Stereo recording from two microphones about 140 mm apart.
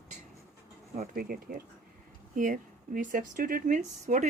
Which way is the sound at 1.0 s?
80° right.